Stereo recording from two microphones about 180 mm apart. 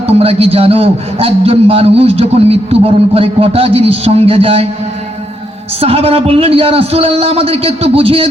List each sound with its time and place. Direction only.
0.2 s a man's voice: 35° right (ahead or behind)
5.8 s a man's voice: 35° right (ahead or behind)